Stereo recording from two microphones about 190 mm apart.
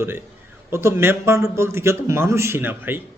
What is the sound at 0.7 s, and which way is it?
Speech, 15° right (ahead or behind).